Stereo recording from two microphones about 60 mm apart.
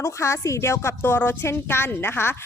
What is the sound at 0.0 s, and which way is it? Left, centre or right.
Speech, left.